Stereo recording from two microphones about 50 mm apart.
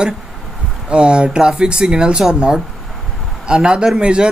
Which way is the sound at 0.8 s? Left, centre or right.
Centre.